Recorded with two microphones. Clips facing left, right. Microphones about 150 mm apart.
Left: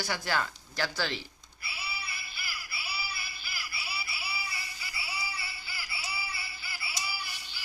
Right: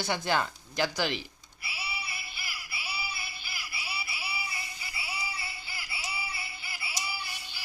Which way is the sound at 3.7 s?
20° right (ahead or behind).